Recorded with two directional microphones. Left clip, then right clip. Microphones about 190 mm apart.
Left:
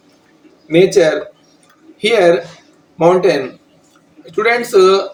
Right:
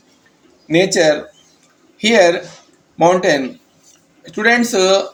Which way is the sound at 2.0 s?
40° right (ahead or behind).